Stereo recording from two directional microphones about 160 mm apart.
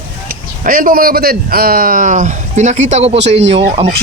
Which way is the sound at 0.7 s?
65° right (ahead or behind).